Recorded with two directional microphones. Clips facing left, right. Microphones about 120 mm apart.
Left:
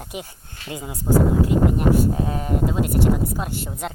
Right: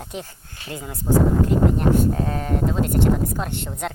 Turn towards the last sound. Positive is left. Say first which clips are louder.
# right 1 dB
turn(degrees=5)  # may be behind; listen again after turning